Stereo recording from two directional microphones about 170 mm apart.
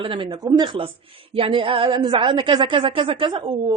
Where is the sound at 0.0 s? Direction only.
30° right (ahead or behind).